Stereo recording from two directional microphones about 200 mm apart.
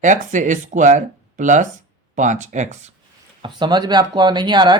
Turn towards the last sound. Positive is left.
turn(degrees=-20)  # may be behind; listen again after turning